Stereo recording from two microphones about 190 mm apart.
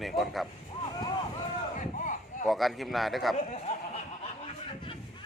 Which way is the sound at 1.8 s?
40° left (ahead or behind).